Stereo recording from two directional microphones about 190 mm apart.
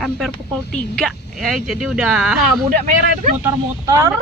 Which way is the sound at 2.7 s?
40° right (ahead or behind).